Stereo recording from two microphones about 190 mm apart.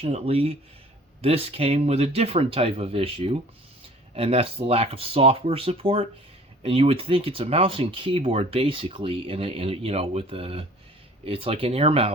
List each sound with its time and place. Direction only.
0.0 s speech: 35° right (ahead or behind)